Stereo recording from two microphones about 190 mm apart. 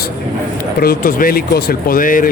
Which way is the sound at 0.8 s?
50° left (ahead or behind).